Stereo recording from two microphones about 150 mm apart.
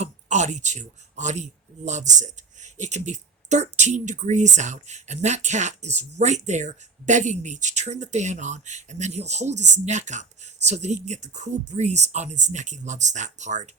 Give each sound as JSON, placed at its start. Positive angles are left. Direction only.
{"t": 0.0, "sound": "speech", "side_deg": -50}